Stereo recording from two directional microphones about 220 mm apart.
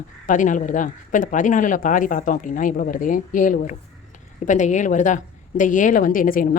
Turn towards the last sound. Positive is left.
turn(degrees=40)  # may be behind; listen again after turning